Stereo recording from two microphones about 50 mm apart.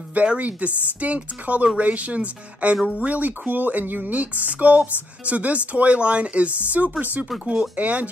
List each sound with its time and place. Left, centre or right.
0.1 s speech: right